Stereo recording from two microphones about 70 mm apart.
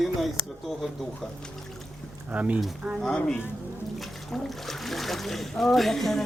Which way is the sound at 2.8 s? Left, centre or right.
Centre.